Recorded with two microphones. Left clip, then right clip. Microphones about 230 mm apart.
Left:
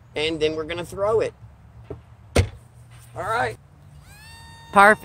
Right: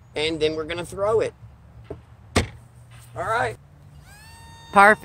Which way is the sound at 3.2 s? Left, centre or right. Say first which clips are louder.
Even; centre.